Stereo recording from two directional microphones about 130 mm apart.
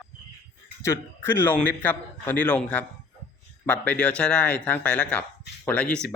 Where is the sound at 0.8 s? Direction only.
20° left (ahead or behind).